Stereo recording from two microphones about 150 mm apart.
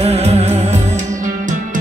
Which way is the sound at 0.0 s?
45° right (ahead or behind).